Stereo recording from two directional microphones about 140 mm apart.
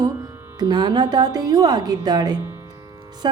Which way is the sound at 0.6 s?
30° right (ahead or behind).